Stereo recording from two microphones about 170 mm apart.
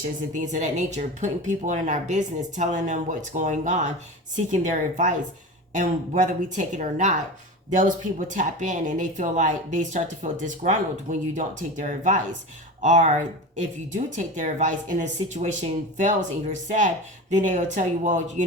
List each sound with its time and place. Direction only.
0.3 s speech: 45° right (ahead or behind)